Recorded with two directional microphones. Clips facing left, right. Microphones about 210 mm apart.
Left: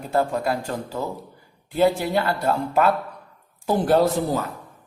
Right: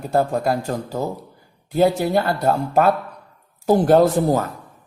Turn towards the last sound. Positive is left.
turn(degrees=-50)  # may be behind; listen again after turning